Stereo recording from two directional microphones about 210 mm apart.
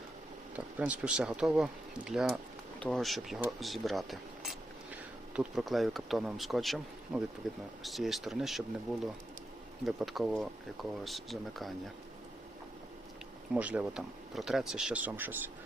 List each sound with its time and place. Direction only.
0.5 s speech: 5° right (ahead or behind)
13.5 s speech: 5° right (ahead or behind)